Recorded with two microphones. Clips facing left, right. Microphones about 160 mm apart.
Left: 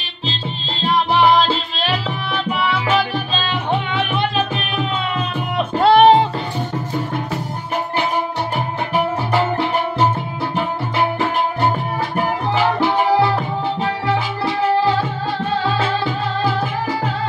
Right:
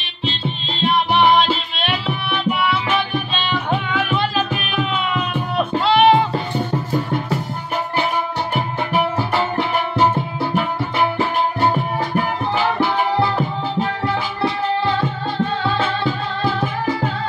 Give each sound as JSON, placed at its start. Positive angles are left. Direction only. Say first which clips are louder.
{"t": 1.8, "sound": "music", "louder": "left 1 dB", "side_deg": 35}
{"t": 5.8, "sound": "music", "louder": "left 4 dB", "side_deg": 50}